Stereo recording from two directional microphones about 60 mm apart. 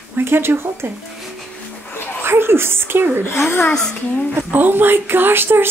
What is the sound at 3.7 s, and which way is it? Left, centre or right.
Speech, centre.